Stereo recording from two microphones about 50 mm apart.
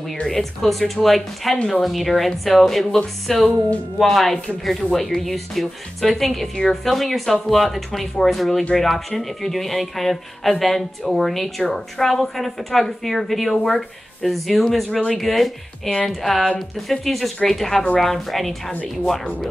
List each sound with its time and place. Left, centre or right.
0.3 s speech: centre
14.9 s speech: centre
15.1 s speech: centre